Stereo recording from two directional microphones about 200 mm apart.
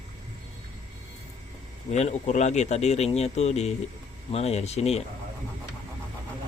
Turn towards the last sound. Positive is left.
turn(degrees=30)  # may be behind; listen again after turning